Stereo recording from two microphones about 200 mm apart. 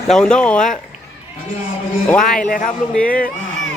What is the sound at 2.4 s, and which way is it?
Speech, 45° left (ahead or behind).